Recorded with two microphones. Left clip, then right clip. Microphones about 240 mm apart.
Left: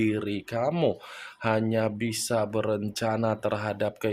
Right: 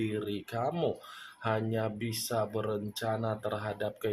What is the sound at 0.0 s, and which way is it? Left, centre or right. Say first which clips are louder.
Speech: left 7 dB; left.